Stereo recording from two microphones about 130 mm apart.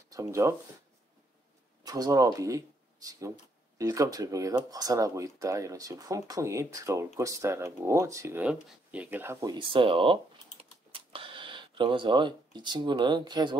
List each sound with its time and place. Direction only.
0.1 s speech: 25° right (ahead or behind)
1.9 s speech: 30° right (ahead or behind)
9.5 s speech: 40° right (ahead or behind)
10.6 s computer keyboard: 45° right (ahead or behind)